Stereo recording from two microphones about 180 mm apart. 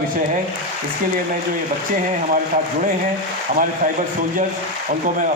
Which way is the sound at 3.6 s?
50° right (ahead or behind).